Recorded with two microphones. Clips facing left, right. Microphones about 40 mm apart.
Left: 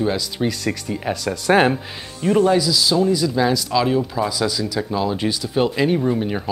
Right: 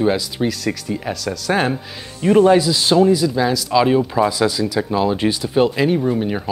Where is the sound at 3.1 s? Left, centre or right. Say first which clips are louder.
Right 3 dB; centre.